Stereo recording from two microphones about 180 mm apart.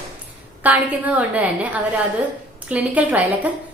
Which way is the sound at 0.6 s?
5° right (ahead or behind).